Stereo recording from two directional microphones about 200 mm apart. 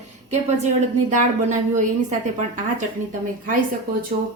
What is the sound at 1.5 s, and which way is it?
Speech, 40° right (ahead or behind).